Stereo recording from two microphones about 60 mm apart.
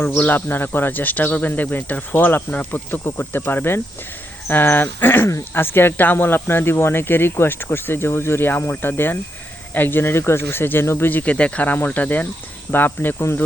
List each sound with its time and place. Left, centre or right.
0.0 s speech: left